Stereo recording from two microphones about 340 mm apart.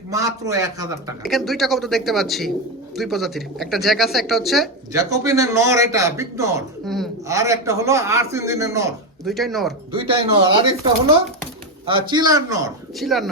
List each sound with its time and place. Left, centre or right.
0.1 s a man's voice: centre
9.9 s a man's voice: centre
11.9 s a man's voice: centre